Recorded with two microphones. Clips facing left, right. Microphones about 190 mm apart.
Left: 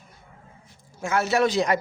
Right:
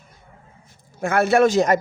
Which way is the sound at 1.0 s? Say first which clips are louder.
Right 6 dB; 55° right (ahead or behind).